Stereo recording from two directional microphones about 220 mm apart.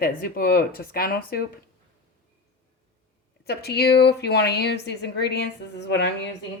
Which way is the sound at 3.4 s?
45° left (ahead or behind).